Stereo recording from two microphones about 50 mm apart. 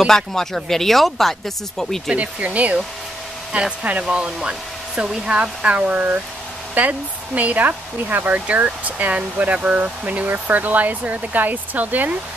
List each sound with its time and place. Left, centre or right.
0.0 s speech: centre
2.1 s speech: right